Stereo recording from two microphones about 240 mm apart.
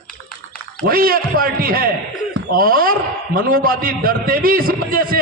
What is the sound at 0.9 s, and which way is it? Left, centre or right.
A man's voice, right.